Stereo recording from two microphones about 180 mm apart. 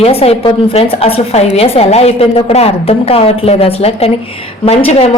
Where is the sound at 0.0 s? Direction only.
35° left (ahead or behind).